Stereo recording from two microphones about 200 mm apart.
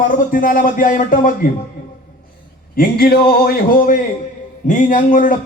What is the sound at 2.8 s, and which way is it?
A man's voice, 50° left (ahead or behind).